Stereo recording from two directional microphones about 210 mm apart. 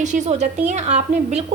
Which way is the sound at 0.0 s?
35° right (ahead or behind).